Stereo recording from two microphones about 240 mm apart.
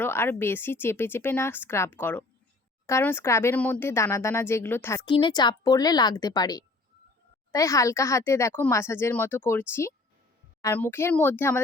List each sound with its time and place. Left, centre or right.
0.0 s speech: centre
5.0 s speech: centre